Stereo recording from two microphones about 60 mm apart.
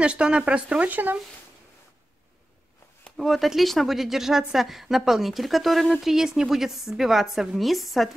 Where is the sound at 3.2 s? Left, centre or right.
Centre.